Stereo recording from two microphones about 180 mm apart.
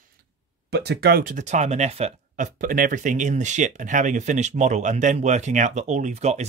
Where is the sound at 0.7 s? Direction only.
65° right (ahead or behind).